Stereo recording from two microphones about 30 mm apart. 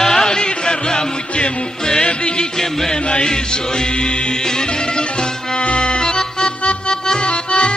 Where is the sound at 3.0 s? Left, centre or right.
Left.